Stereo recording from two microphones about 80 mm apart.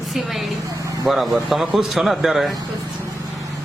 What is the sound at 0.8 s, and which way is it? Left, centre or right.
Vehicle, right.